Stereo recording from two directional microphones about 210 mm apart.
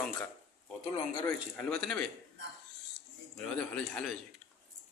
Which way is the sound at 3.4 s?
5° left (ahead or behind).